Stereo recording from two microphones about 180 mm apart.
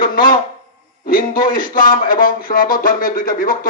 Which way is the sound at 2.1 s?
50° left (ahead or behind).